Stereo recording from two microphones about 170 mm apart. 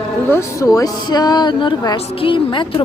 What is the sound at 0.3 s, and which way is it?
Speech, 15° left (ahead or behind).